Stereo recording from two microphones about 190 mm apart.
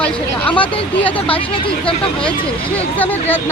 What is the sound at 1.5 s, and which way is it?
Speech, 30° left (ahead or behind).